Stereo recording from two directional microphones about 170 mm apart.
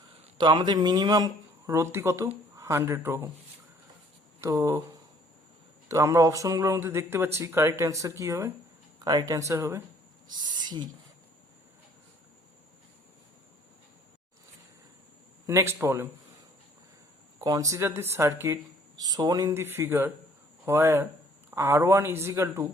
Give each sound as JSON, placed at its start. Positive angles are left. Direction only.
{"t": 0.3, "sound": "speech", "side_deg": -25}
{"t": 4.4, "sound": "speech", "side_deg": -20}
{"t": 5.9, "sound": "speech", "side_deg": -20}
{"t": 15.4, "sound": "speech", "side_deg": -15}
{"t": 17.4, "sound": "speech", "side_deg": -20}